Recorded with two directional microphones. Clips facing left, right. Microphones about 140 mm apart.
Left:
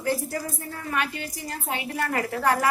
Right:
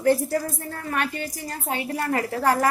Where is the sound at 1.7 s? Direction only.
35° right (ahead or behind).